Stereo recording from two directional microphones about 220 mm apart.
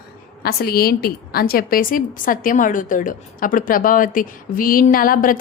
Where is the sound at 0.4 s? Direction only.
45° left (ahead or behind).